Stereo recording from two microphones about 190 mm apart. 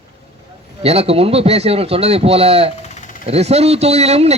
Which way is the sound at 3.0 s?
45° left (ahead or behind).